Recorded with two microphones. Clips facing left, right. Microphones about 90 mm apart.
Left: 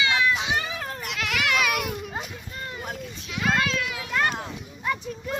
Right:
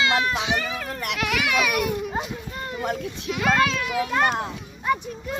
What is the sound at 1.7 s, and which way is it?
Children playing, 5° right (ahead or behind).